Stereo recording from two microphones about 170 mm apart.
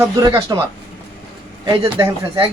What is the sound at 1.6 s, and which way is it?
Speech, 20° right (ahead or behind).